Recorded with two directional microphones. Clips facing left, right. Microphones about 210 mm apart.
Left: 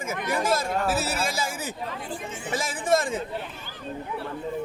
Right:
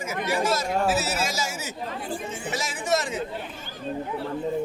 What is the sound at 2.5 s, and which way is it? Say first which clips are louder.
Speech: left 3 dB; 50° left (ahead or behind).